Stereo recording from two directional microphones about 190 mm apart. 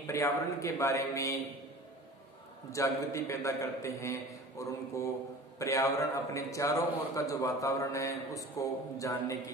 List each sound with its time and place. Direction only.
0.0 s a man's voice: 15° left (ahead or behind)
2.7 s a man's voice: 15° left (ahead or behind)